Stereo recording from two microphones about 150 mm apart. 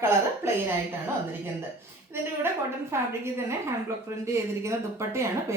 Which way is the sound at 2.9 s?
15° right (ahead or behind).